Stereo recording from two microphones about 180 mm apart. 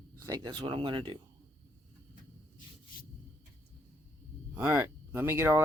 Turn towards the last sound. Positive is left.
turn(degrees=-15)  # may be behind; listen again after turning